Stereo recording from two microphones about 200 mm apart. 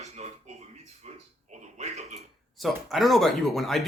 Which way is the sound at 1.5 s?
35° right (ahead or behind).